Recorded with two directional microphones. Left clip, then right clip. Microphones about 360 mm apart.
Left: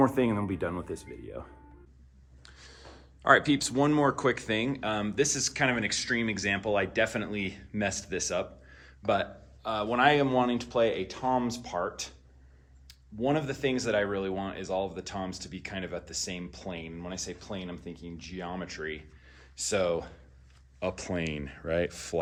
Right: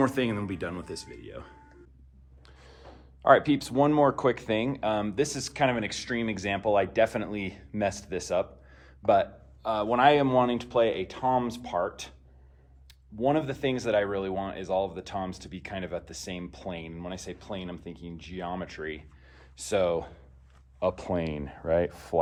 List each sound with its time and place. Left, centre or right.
0.0 s speech: centre
2.4 s a sound: centre
3.2 s speech: centre
13.2 s speech: centre